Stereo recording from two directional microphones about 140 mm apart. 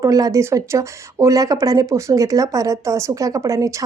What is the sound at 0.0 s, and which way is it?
Speech, 25° right (ahead or behind).